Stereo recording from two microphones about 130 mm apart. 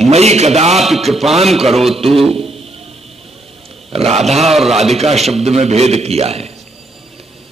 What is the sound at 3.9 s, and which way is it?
Speech, 55° right (ahead or behind).